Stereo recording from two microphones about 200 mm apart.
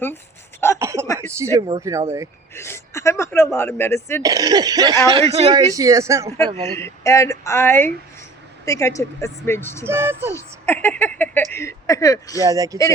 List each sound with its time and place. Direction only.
0.8 s a sound: 15° right (ahead or behind)
1.0 s a sound: 15° left (ahead or behind)
1.4 s speech: 15° right (ahead or behind)
2.6 s speech: 15° left (ahead or behind)
4.2 s cough: 20° right (ahead or behind)
5.3 s cough: 30° right (ahead or behind)
5.5 s speech: 20° right (ahead or behind)
6.6 s speech: 15° left (ahead or behind)
9.8 s speech: 10° right (ahead or behind)
10.3 s speech: 10° left (ahead or behind)
12.4 s speech: 15° right (ahead or behind)